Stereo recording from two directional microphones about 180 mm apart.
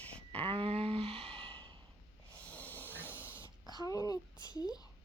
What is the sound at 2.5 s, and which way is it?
Hiss, 10° left (ahead or behind).